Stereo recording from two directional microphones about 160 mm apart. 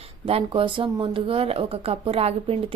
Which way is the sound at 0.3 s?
35° right (ahead or behind).